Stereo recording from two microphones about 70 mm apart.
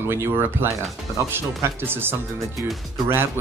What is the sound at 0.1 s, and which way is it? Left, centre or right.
Speech, right.